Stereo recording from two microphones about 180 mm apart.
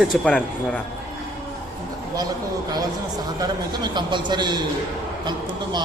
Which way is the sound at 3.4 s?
25° right (ahead or behind).